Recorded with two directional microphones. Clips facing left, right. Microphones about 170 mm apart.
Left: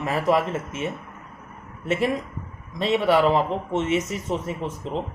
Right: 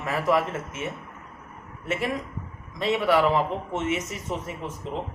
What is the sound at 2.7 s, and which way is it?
Speech, 30° left (ahead or behind).